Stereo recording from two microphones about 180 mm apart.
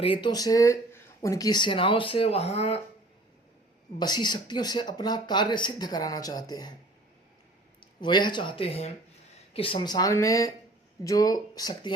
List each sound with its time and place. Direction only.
0.0 s speech: 30° left (ahead or behind)
3.9 s speech: 25° left (ahead or behind)
7.8 s speech: 25° left (ahead or behind)